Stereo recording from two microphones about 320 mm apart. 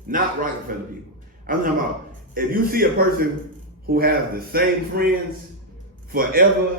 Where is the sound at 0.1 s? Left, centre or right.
Right.